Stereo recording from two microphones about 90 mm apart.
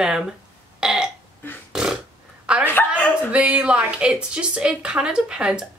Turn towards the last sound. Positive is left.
turn(degrees=-10)  # may be behind; listen again after turning